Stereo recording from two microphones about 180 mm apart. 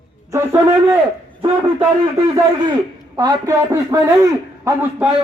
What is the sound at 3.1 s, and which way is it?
A man's voice, 20° right (ahead or behind).